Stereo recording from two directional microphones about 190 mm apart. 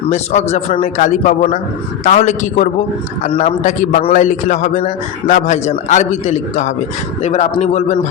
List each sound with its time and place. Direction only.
0.1 s a man's voice: 35° left (ahead or behind)